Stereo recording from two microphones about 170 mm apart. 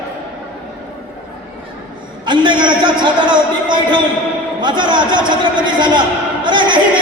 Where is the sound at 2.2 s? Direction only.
25° right (ahead or behind).